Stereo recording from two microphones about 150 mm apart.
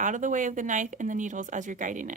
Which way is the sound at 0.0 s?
60° right (ahead or behind).